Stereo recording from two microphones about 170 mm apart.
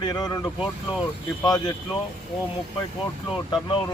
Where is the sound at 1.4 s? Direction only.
25° left (ahead or behind).